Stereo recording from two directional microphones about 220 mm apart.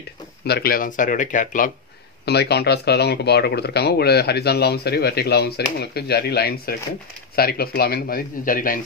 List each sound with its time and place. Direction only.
0.5 s speech: 45° left (ahead or behind)
2.2 s speech: 50° left (ahead or behind)